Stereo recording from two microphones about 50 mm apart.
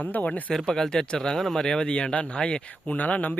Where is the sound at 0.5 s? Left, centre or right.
Centre.